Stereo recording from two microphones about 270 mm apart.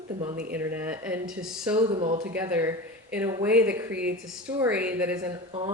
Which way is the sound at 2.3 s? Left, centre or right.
Centre.